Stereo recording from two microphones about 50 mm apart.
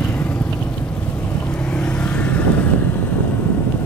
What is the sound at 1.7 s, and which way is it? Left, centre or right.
Vehicle, centre.